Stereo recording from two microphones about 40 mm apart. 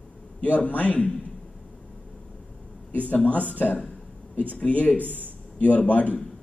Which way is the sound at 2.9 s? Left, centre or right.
Left.